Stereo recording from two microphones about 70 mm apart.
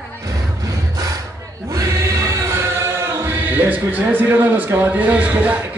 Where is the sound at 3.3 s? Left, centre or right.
Right.